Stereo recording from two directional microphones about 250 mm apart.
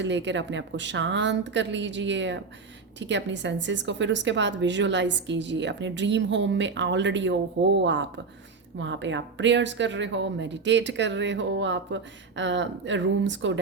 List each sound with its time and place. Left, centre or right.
0.0 s a woman's voice: right